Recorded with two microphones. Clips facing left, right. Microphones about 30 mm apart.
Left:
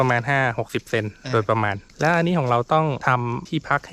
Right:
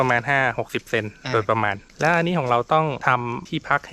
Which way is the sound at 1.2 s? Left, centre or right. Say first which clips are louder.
Even; centre.